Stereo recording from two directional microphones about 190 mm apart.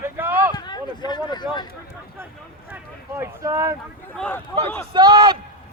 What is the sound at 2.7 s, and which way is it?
Speech, 10° right (ahead or behind).